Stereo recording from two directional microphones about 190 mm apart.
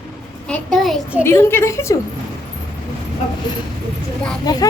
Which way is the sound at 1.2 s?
15° left (ahead or behind).